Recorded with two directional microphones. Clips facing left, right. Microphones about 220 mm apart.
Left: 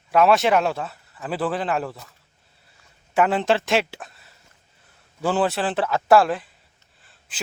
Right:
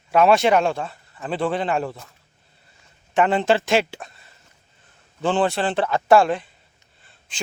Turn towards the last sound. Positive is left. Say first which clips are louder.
# right 2 dB
turn(degrees=5)  # may be behind; listen again after turning